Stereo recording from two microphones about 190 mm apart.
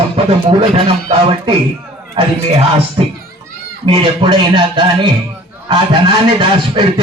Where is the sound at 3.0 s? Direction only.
30° right (ahead or behind).